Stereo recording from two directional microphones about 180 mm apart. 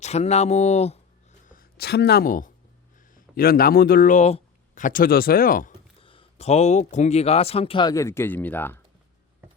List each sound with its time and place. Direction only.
0.0 s speech: 35° left (ahead or behind)
6.0 s speech: 30° left (ahead or behind); by 8.8 s 10° left (ahead or behind)